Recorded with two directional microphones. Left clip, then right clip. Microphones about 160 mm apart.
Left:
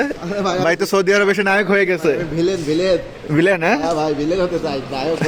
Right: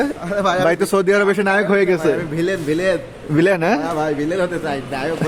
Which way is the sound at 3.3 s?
15° right (ahead or behind).